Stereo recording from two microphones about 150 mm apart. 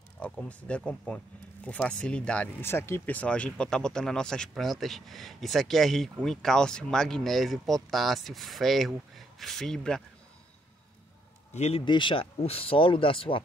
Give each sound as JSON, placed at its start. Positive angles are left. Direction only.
{"t": 0.2, "sound": "speech", "side_deg": 10}
{"t": 11.5, "sound": "a man's voice", "side_deg": 45}
{"t": 11.8, "sound": "speech", "side_deg": 35}